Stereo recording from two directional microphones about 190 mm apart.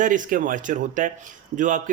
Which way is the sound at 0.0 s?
45° right (ahead or behind).